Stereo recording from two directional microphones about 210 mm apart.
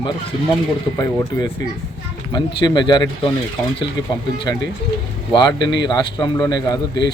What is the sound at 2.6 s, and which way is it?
Speech, 20° left (ahead or behind).